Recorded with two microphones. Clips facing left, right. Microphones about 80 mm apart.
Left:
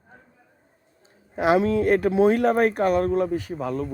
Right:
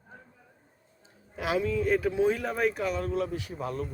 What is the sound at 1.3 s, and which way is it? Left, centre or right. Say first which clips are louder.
Speech: left 11 dB; left.